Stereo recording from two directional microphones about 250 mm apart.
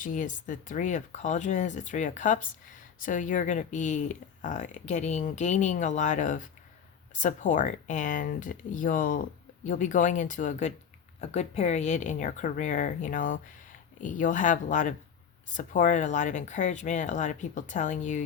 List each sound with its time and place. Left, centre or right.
0.0 s speech: left